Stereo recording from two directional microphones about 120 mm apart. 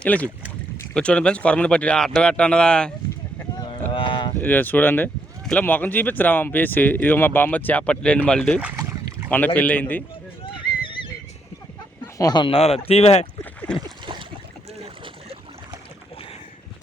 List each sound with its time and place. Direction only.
0.0 s speech: 10° left (ahead or behind)
3.9 s a sound: 45° left (ahead or behind)
4.4 s speech: 15° left (ahead or behind)
8.7 s boat: 25° right (ahead or behind)
9.3 s speech: 15° left (ahead or behind)
10.4 s horse: 45° left (ahead or behind)
12.1 s speech: 35° left (ahead or behind); by 13.2 s 60° left (ahead or behind)
13.4 s a sound: 15° left (ahead or behind)
13.8 s a sound: 40° right (ahead or behind)
14.8 s boat: 55° right (ahead or behind)